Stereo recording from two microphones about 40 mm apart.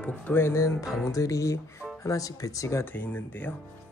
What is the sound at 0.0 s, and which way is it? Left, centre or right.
Speech, left.